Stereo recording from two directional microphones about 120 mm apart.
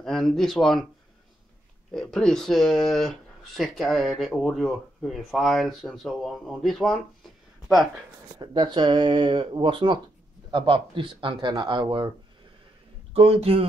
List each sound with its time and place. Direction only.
0.0 s speech: 5° left (ahead or behind)
1.9 s speech: 5° left (ahead or behind)
8.4 s speech: 40° right (ahead or behind)
13.1 s speech: 55° right (ahead or behind)